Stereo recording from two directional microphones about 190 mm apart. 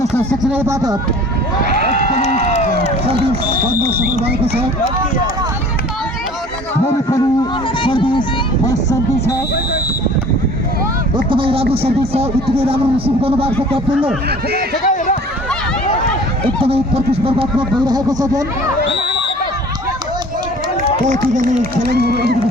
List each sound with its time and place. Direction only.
0.0 s a sound: 5° left (ahead or behind)
0.4 s speech: 10° right (ahead or behind)
1.8 s a sound: 60° right (ahead or behind)
2.1 s crowd: 35° left (ahead or behind)
4.3 s speech: 55° right (ahead or behind)
6.8 s speech: 15° left (ahead or behind)
11.3 s speech: 30° right (ahead or behind)
14.8 s run: 40° left (ahead or behind)
16.6 s speech: 30° right (ahead or behind)
21.1 s speech: 45° right (ahead or behind)
21.8 s speech: 55° right (ahead or behind)